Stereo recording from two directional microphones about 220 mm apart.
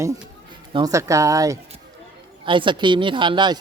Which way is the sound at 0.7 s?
15° right (ahead or behind).